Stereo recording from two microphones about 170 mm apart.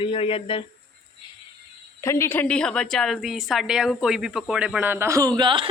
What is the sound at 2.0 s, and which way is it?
A woman's voice, 15° left (ahead or behind).